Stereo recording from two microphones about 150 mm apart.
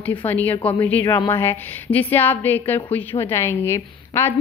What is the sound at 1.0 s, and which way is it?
A woman's voice, 25° left (ahead or behind).